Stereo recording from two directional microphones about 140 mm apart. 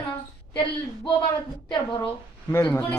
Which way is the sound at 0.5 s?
40° left (ahead or behind).